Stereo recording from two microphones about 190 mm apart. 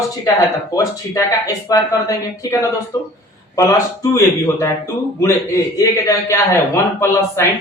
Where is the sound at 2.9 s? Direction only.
20° left (ahead or behind).